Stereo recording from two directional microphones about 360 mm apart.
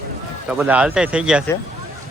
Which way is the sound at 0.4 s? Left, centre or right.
Centre.